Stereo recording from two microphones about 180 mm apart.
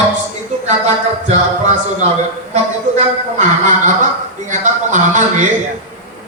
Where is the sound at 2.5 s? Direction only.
40° right (ahead or behind).